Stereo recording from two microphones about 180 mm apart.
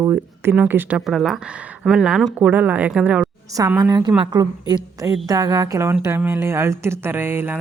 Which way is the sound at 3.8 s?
20° right (ahead or behind).